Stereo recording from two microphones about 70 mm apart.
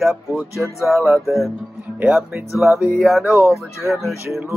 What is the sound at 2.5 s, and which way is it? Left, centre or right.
Speech, centre.